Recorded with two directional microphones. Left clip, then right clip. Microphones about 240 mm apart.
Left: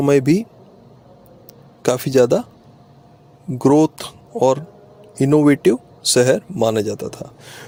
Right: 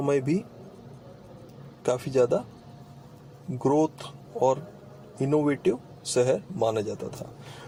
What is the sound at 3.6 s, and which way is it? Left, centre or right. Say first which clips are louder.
A man's voice: left 10 dB; left.